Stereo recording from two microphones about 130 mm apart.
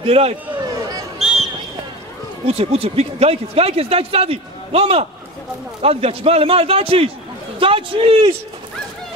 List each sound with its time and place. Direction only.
0.0 s speech: 50° right (ahead or behind)
1.2 s a sound: centre (ahead or behind)
2.4 s speech: 50° right (ahead or behind)